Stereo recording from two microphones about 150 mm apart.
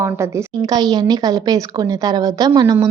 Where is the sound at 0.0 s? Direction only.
20° right (ahead or behind).